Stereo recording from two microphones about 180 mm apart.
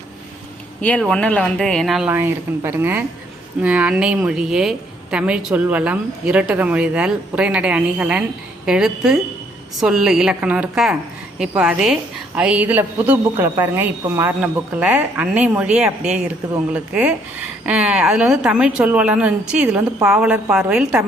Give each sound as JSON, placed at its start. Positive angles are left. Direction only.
{"t": 0.8, "sound": "a woman's voice", "side_deg": 10}